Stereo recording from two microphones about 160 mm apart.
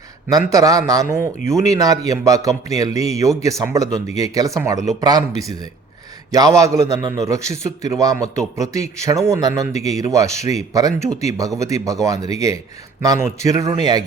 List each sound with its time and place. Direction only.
0.3 s speech: 20° right (ahead or behind)
6.3 s speech: 20° right (ahead or behind)